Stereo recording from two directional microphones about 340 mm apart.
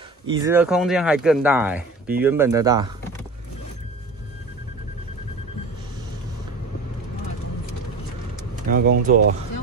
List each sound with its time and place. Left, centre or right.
0.3 s speech: centre
8.6 s speech: right